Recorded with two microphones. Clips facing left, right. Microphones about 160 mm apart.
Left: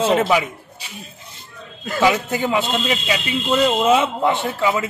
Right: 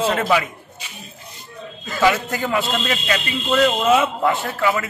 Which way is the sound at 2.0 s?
10° left (ahead or behind).